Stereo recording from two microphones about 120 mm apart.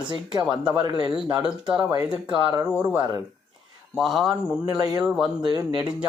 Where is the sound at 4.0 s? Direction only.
Centre (ahead or behind).